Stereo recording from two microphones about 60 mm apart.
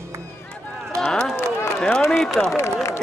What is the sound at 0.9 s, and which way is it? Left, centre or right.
Run, centre.